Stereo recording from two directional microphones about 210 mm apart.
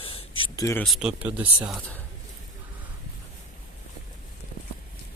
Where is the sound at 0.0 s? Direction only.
25° left (ahead or behind).